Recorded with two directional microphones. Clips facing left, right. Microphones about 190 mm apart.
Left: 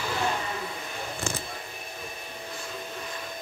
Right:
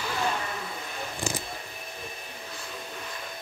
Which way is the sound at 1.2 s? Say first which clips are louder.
Right 2 dB; 35° right (ahead or behind).